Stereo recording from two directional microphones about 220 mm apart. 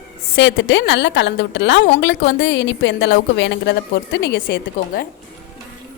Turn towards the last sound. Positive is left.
turn(degrees=45)  # may be behind; listen again after turning